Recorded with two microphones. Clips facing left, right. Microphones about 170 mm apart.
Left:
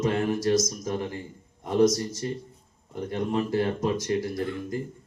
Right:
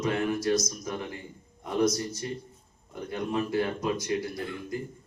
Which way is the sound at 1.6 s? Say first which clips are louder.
Left 5 dB; 40° left (ahead or behind).